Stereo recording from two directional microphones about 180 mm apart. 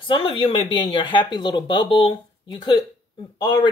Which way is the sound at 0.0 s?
30° left (ahead or behind).